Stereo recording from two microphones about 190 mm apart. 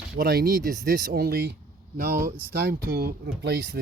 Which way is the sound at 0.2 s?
55° right (ahead or behind).